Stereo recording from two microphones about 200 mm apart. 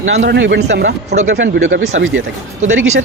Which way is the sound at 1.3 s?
70° right (ahead or behind).